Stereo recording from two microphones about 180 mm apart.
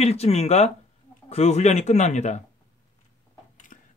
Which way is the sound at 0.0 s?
35° left (ahead or behind).